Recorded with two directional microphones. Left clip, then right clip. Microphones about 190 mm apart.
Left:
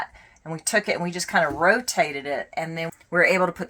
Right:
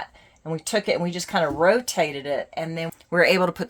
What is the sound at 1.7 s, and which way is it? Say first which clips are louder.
Speech: even; 90° right.